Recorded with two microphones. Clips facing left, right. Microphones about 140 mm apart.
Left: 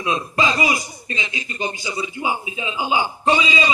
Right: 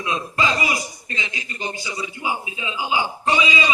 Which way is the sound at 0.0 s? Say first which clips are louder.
Left 2 dB; 20° left (ahead or behind).